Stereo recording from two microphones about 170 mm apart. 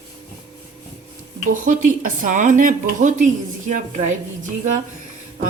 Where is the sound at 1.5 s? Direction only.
50° right (ahead or behind).